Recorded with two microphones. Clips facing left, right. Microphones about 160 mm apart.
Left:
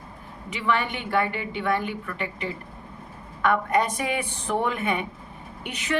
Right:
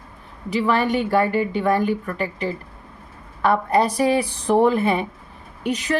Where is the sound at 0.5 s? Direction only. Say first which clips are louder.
Right 7 dB; 40° right (ahead or behind).